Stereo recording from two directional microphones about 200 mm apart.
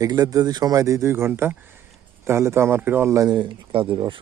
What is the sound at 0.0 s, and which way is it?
A man's voice, 20° right (ahead or behind).